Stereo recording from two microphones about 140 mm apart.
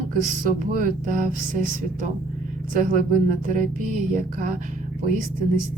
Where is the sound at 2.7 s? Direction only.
75° right (ahead or behind).